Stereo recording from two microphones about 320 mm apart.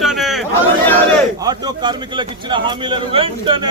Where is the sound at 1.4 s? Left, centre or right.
Centre.